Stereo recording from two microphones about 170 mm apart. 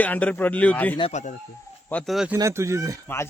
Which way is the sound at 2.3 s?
15° right (ahead or behind).